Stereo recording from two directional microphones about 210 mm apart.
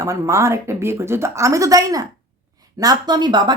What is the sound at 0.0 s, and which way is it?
Speech, 15° right (ahead or behind).